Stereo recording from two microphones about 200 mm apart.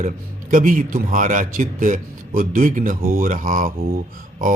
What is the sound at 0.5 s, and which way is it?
Speech, 40° right (ahead or behind).